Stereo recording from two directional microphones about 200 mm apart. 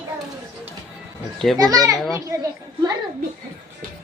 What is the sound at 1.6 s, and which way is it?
Speech, 20° right (ahead or behind).